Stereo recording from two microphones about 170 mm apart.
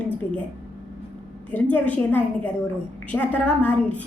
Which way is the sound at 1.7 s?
10° left (ahead or behind).